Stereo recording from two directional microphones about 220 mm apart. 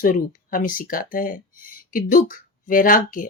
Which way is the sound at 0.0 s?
40° left (ahead or behind).